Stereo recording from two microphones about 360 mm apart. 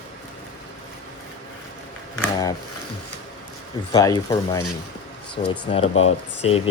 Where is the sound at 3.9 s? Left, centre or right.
Centre.